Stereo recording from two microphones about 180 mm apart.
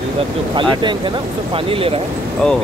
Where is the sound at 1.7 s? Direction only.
30° right (ahead or behind).